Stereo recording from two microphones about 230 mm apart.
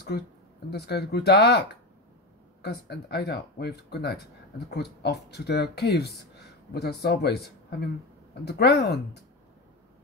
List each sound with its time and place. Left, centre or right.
0.1 s speech: left